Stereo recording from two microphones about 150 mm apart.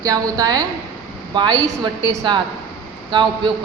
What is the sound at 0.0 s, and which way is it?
A woman's voice, 25° right (ahead or behind).